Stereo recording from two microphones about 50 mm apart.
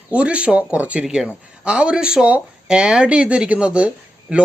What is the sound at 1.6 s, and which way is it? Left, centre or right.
Speech, right.